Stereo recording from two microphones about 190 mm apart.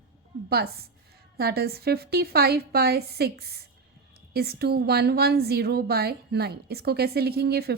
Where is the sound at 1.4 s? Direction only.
55° right (ahead or behind).